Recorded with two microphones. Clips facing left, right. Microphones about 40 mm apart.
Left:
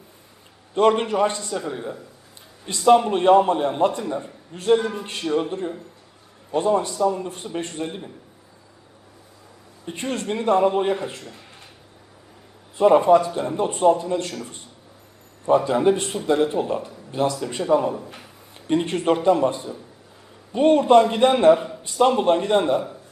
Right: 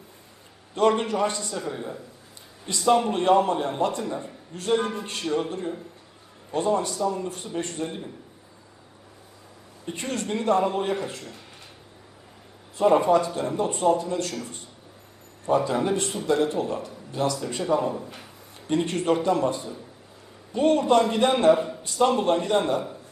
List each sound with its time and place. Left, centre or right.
0.8 s a man's voice: left
1.5 s a man's voice: centre
2.6 s a man's voice: left
10.0 s a man's voice: centre
12.7 s a man's voice: centre
15.4 s a man's voice: centre
17.3 s a man's voice: centre